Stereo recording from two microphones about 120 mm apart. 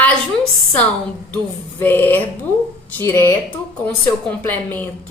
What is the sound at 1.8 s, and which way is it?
A woman's voice, 15° left (ahead or behind).